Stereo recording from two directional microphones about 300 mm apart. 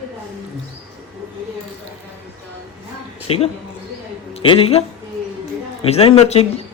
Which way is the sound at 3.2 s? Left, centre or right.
Centre.